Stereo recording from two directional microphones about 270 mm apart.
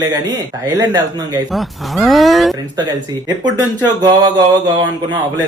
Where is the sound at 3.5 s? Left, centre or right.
Centre.